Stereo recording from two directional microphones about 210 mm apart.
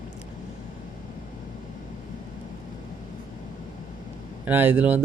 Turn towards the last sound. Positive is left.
turn(degrees=-10)  # may be behind; listen again after turning